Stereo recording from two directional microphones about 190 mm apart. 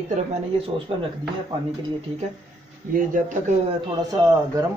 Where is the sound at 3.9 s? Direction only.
20° right (ahead or behind).